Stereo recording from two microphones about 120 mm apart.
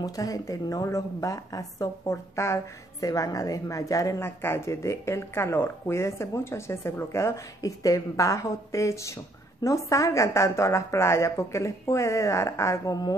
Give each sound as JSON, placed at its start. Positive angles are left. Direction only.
{"t": 0.0, "sound": "a woman's voice", "side_deg": 30}